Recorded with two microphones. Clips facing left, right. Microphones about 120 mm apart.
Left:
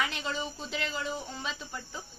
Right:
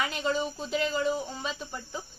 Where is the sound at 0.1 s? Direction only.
5° right (ahead or behind).